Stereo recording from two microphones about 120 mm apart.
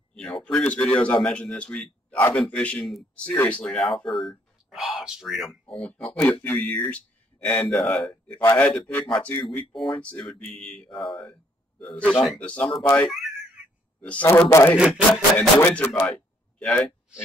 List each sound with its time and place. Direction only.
0.1 s a man's voice: 5° left (ahead or behind)
7.6 s a man's voice: 5° left (ahead or behind)
14.8 s a man's voice: 5° right (ahead or behind)
15.3 s speech: 15° left (ahead or behind)